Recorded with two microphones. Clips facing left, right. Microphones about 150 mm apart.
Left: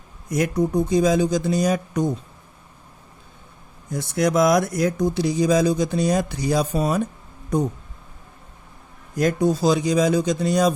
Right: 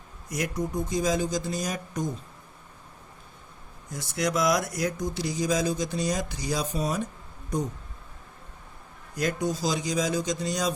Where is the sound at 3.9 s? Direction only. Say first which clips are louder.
Left 8 dB; 55° left (ahead or behind).